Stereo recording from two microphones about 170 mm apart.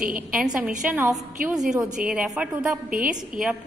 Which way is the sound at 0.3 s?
5° right (ahead or behind).